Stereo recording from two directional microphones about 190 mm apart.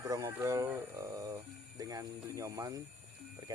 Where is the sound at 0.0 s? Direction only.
15° right (ahead or behind).